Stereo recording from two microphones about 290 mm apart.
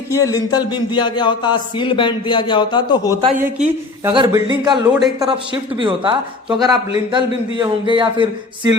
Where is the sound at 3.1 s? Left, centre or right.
Centre.